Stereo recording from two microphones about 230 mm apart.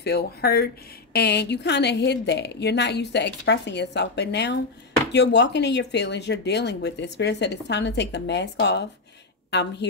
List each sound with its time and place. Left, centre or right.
0.0 s speech: left